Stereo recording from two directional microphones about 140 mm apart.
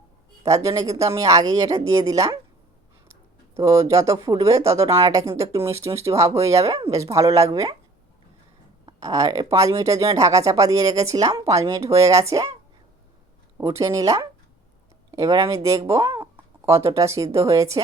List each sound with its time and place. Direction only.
0.4 s speech: 20° right (ahead or behind)
3.6 s speech: 25° right (ahead or behind)
9.0 s speech: 25° right (ahead or behind)
13.6 s speech: 20° right (ahead or behind)